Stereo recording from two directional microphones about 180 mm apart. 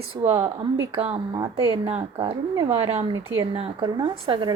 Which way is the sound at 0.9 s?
30° right (ahead or behind).